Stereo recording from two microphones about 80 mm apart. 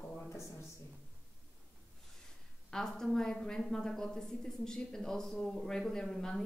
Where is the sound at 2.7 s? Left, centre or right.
Centre.